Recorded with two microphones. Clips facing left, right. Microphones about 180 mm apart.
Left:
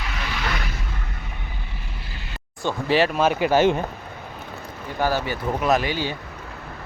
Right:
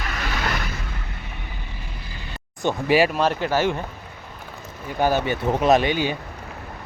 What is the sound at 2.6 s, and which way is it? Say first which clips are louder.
Speech: right 2 dB; 15° right (ahead or behind).